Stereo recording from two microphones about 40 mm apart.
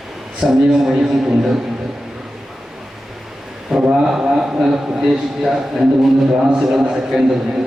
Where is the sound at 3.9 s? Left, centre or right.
Centre.